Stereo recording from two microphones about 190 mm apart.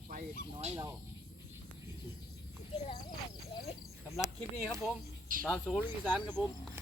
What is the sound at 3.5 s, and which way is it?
Cricket, 25° left (ahead or behind).